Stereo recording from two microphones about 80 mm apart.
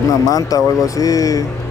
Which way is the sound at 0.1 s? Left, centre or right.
Left.